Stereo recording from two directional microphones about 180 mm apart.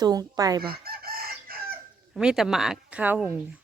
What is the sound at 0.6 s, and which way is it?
Chicken, 55° right (ahead or behind).